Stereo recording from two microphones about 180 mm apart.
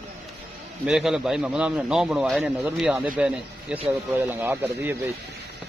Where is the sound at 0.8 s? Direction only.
5° right (ahead or behind).